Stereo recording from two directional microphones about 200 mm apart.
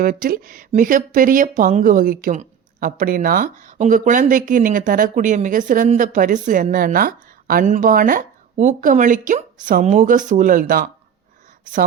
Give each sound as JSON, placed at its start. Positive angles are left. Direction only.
{"t": 0.0, "sound": "speech", "side_deg": -45}